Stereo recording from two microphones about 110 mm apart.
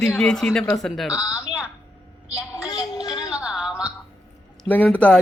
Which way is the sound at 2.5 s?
30° left (ahead or behind).